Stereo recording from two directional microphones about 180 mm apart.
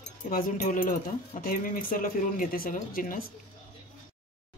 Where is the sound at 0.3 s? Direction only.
50° left (ahead or behind).